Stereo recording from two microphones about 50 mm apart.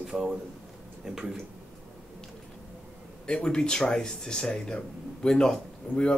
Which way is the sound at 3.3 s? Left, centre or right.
Centre.